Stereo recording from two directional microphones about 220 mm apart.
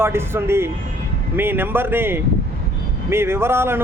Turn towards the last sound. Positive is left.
turn(degrees=-10)  # may be behind; listen again after turning